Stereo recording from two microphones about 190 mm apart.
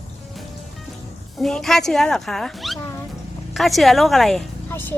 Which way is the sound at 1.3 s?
Centre (ahead or behind).